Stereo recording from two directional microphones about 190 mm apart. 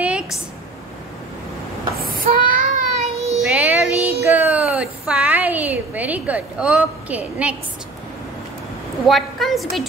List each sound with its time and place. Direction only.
0.0 s a sound: 5° right (ahead or behind)
2.0 s child singing: 50° right (ahead or behind)
3.3 s music: 5° right (ahead or behind)
4.2 s a sound: 10° right (ahead or behind)
4.7 s a woman's voice: 5° right (ahead or behind)
9.0 s a woman's voice: centre (ahead or behind)